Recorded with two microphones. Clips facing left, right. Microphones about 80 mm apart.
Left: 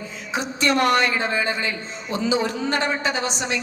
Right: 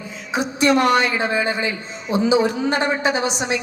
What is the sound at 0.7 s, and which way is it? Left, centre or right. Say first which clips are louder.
Speech: right 2 dB; centre.